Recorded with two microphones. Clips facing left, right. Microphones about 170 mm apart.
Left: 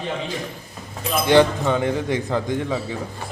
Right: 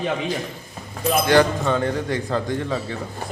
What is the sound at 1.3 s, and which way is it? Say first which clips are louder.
A man's voice: left 3 dB; 20° left (ahead or behind).